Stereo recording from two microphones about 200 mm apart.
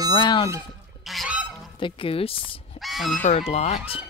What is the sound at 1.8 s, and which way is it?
Speech, 25° left (ahead or behind).